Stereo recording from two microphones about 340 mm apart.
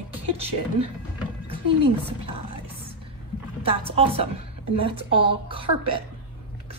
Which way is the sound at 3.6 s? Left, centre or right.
Centre.